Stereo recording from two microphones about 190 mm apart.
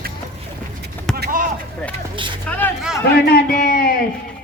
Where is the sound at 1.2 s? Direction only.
45° right (ahead or behind).